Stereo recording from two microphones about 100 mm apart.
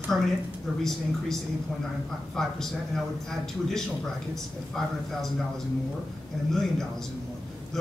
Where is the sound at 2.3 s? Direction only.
5° left (ahead or behind).